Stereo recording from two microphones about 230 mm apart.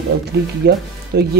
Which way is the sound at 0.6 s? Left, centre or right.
Right.